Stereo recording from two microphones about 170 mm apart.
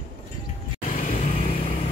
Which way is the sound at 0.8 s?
45° left (ahead or behind).